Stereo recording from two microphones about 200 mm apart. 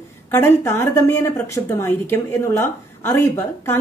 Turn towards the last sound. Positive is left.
turn(degrees=15)  # may be behind; listen again after turning